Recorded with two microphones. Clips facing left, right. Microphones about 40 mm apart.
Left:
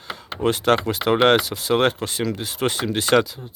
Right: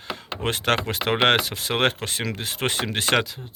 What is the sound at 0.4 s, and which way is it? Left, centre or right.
Speech, right.